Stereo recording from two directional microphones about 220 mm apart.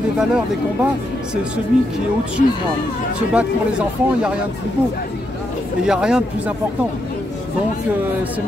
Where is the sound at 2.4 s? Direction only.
40° left (ahead or behind).